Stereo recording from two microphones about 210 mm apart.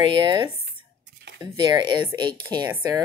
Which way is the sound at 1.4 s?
20° right (ahead or behind).